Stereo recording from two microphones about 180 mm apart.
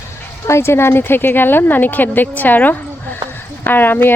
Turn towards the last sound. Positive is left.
turn(degrees=10)  # may be behind; listen again after turning